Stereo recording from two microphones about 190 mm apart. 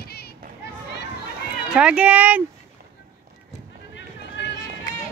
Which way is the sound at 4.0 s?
65° left (ahead or behind).